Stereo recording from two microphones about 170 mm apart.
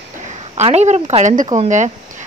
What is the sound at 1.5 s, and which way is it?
Speech, 50° right (ahead or behind).